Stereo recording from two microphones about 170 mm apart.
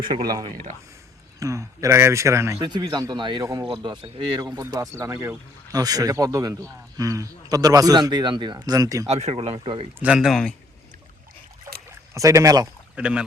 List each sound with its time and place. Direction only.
0.1 s a man's voice: 25° right (ahead or behind)
9.0 s speech: 40° right (ahead or behind)
10.0 s speech: 5° right (ahead or behind)
11.9 s a sound: 20° right (ahead or behind)
13.0 s speech: 5° right (ahead or behind)